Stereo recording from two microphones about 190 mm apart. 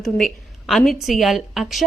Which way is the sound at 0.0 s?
Centre (ahead or behind).